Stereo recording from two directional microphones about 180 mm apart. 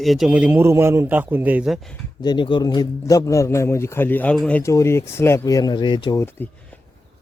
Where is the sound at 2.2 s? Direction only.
25° left (ahead or behind).